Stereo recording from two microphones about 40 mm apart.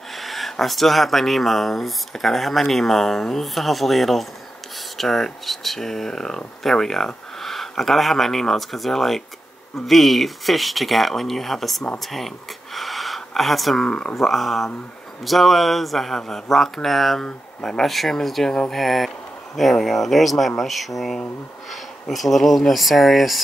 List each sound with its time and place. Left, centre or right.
0.2 s speech: centre
12.7 s a sound: centre
13.3 s speech: centre
13.7 s speech: left
14.1 s speech: centre